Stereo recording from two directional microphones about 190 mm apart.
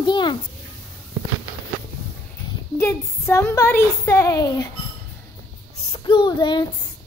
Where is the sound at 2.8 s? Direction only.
15° left (ahead or behind).